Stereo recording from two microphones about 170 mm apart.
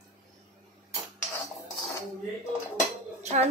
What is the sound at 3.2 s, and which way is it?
Music, 40° right (ahead or behind).